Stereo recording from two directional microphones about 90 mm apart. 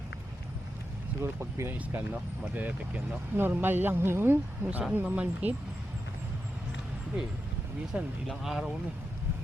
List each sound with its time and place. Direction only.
1.2 s speech: 30° right (ahead or behind)
7.9 s speech: 15° right (ahead or behind)
8.3 s speech: 5° right (ahead or behind)